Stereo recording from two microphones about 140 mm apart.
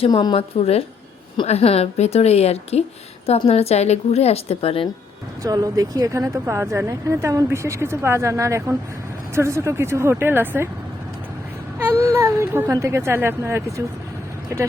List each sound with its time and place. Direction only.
0.0 s a woman's voice: 30° left (ahead or behind)
0.3 s a woman's voice: 45° left (ahead or behind)
5.4 s speech: 25° right (ahead or behind)
11.8 s speech: 15° right (ahead or behind)